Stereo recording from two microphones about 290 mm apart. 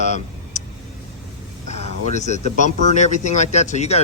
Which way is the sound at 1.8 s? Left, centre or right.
Left.